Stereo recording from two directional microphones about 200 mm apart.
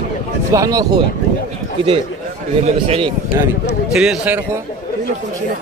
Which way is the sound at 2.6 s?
30° right (ahead or behind).